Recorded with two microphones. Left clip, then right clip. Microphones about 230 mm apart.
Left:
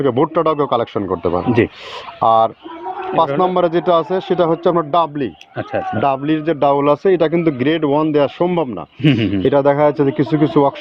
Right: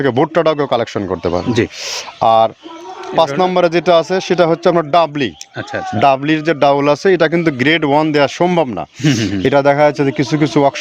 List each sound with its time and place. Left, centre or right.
0.0 s a man's voice: right
9.0 s speech: right
9.4 s a man's voice: right